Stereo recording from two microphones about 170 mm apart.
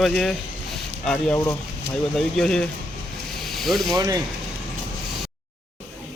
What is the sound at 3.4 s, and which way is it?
Hiss, centre (ahead or behind).